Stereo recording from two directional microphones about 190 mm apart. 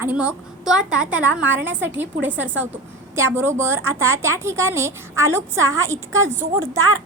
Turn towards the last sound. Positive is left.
turn(degrees=-15)  # may be behind; listen again after turning